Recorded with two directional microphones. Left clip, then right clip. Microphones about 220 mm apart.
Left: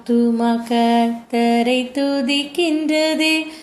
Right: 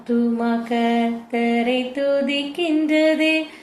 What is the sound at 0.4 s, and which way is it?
Music, 55° left (ahead or behind).